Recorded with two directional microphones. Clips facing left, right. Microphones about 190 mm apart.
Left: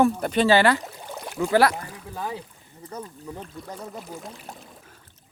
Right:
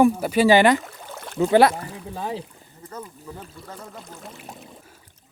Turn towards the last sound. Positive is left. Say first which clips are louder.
# right 2 dB
turn(degrees=-5)  # may be behind; listen again after turning